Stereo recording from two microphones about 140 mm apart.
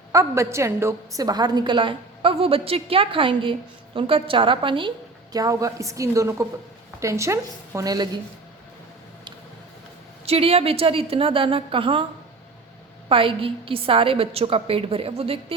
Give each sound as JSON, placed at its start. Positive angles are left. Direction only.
{"t": 0.1, "sound": "a woman's voice", "side_deg": -20}
{"t": 5.3, "sound": "a woman's voice", "side_deg": -25}
{"t": 10.2, "sound": "a woman's voice", "side_deg": -45}
{"t": 13.1, "sound": "a woman's voice", "side_deg": -40}